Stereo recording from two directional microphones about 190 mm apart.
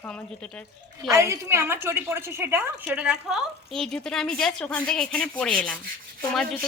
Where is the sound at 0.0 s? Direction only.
10° left (ahead or behind).